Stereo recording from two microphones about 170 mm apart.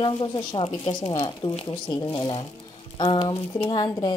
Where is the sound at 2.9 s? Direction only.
25° left (ahead or behind).